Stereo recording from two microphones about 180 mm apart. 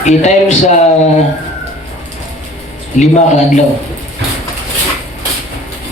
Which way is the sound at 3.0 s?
40° left (ahead or behind).